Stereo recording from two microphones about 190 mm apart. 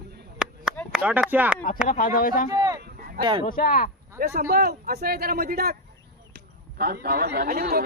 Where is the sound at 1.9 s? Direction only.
45° left (ahead or behind).